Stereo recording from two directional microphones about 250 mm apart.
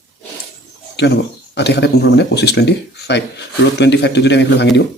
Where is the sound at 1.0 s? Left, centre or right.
Left.